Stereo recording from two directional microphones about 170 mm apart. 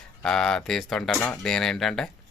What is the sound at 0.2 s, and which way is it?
Speech, 5° left (ahead or behind).